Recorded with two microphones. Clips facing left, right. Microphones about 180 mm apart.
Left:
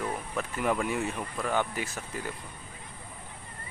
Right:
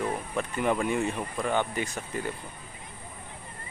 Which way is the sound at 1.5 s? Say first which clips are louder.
Right 1 dB; 5° left (ahead or behind).